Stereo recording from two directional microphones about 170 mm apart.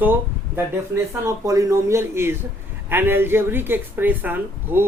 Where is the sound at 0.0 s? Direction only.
10° right (ahead or behind).